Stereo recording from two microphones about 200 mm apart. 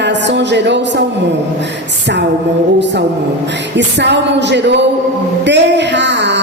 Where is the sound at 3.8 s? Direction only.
60° right (ahead or behind).